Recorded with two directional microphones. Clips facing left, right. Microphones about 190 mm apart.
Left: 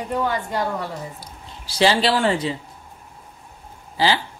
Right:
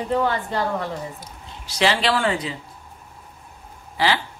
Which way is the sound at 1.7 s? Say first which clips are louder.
Left 2 dB; 35° left (ahead or behind).